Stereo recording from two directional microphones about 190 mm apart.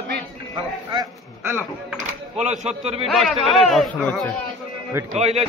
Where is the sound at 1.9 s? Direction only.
40° right (ahead or behind).